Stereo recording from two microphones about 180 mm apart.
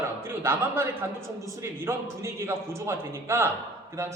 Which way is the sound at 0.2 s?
10° right (ahead or behind).